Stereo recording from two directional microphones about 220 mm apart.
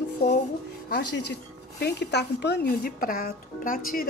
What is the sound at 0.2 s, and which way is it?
Speech, 50° left (ahead or behind).